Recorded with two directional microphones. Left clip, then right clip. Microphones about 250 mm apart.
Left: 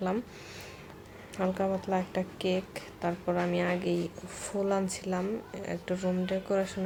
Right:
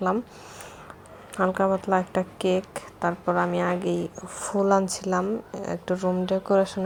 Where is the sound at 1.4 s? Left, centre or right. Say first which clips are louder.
Right 8 dB; centre.